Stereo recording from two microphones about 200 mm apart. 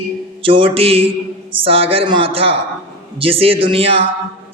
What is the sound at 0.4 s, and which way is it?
A man's voice, 25° right (ahead or behind).